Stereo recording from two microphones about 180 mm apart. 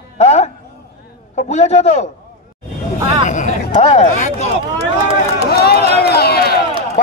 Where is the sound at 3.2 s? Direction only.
40° left (ahead or behind).